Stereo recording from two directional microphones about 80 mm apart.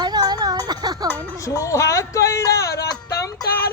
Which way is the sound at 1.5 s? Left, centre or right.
Left.